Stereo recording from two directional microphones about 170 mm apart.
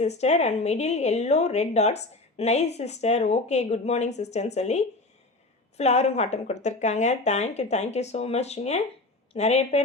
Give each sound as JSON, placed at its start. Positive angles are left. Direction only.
{"t": 0.0, "sound": "speech", "side_deg": 40}